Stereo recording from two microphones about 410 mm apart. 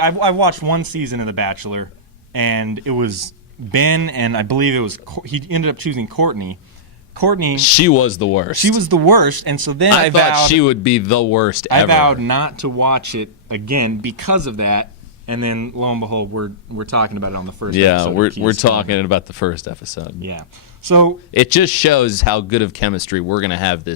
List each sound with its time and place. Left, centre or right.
0.0 s speech: right
7.8 s speech: left
8.6 s speech: right
10.6 s speech: left
11.7 s speech: right
18.4 s speech: left
20.8 s speech: right
21.3 s speech: left